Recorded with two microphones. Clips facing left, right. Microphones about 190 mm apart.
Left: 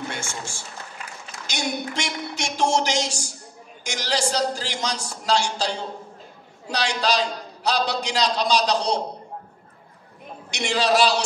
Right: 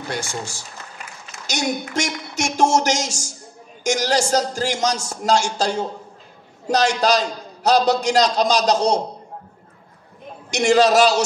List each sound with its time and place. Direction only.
0.1 s a man's voice: 35° right (ahead or behind)
10.5 s a man's voice: 45° right (ahead or behind)